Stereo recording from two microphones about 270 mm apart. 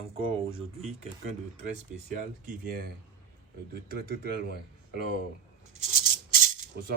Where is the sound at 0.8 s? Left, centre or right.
Right.